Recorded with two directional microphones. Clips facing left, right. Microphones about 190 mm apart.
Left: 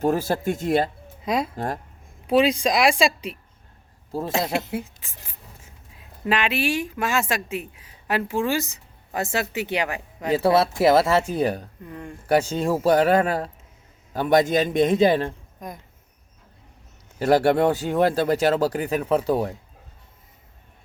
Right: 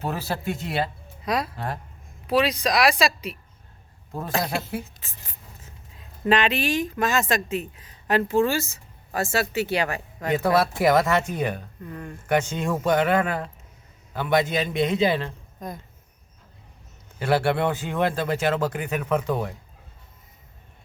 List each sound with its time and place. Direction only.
0.0 s a man's voice: 45° left (ahead or behind)
1.2 s speech: 25° left (ahead or behind)
1.5 s a man's voice: 45° left (ahead or behind)
2.3 s speech: 25° left (ahead or behind)
10.3 s speech: 25° left (ahead or behind)
11.9 s speech: 20° left (ahead or behind)
12.2 s a man's voice: 35° left (ahead or behind)
15.6 s speech: 10° left (ahead or behind)
17.2 s speech: 40° left (ahead or behind)